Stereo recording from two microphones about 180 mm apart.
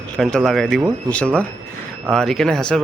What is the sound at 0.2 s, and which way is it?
Speech, 5° left (ahead or behind).